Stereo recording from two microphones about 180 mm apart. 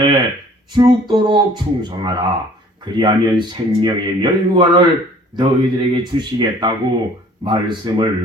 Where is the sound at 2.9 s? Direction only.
25° right (ahead or behind).